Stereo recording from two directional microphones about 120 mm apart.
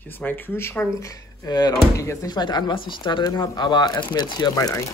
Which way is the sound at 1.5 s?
35° left (ahead or behind).